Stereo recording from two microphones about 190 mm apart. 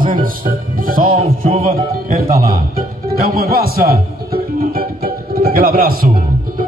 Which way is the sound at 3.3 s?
55° right (ahead or behind).